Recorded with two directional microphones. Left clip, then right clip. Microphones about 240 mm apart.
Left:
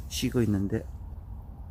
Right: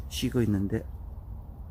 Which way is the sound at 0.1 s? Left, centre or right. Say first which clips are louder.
Left 1 dB; centre.